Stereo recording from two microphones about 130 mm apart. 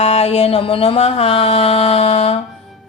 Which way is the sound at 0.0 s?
50° left (ahead or behind).